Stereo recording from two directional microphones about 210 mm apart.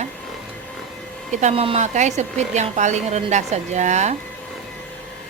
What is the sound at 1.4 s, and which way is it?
A woman's voice, 25° right (ahead or behind).